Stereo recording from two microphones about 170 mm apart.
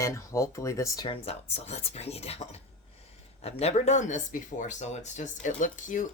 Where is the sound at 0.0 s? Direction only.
20° left (ahead or behind).